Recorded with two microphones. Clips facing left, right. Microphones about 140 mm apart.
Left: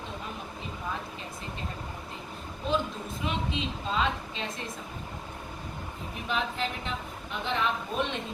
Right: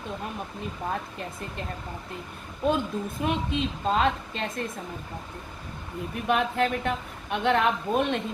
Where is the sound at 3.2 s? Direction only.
55° right (ahead or behind).